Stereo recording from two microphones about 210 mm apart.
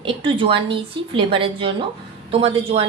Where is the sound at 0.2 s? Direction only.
25° right (ahead or behind).